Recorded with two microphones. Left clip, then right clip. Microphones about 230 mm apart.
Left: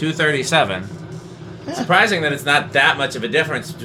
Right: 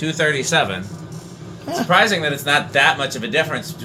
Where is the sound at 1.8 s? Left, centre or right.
Centre.